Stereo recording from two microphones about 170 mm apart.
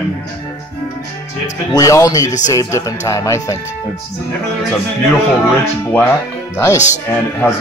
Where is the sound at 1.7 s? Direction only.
20° left (ahead or behind).